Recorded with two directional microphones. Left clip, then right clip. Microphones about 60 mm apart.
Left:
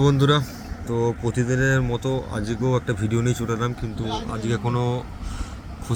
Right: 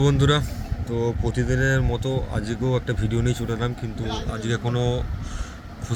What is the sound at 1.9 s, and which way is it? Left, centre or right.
A man's voice, left.